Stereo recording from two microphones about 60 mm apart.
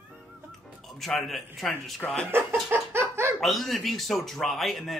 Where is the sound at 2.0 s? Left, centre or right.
Centre.